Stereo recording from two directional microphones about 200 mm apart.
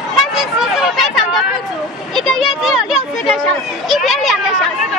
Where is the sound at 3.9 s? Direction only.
Centre (ahead or behind).